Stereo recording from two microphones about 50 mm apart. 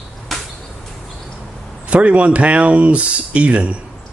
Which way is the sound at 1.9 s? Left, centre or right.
Right.